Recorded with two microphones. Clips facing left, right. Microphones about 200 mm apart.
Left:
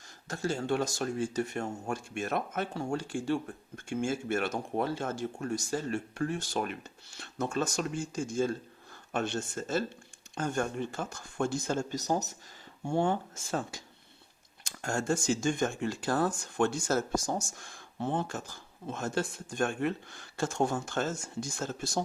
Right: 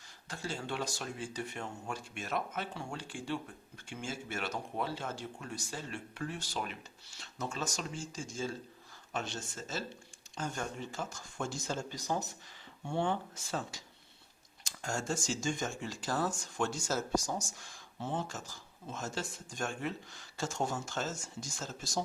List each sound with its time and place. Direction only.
0.3 s speech: 45° left (ahead or behind)